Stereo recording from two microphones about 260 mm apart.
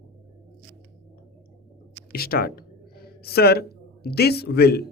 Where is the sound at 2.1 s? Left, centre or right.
Left.